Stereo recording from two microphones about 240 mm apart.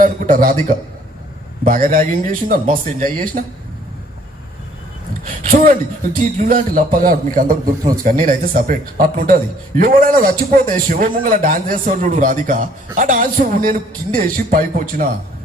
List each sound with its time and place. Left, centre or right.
0.0 s a man's voice: right
1.6 s a man's voice: right
5.4 s a man's voice: right